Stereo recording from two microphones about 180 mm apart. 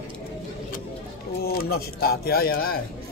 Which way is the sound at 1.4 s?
60° left (ahead or behind).